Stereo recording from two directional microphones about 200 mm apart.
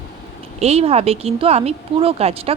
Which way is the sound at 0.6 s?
30° right (ahead or behind).